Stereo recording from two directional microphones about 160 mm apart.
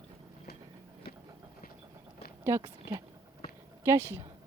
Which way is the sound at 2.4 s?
15° right (ahead or behind).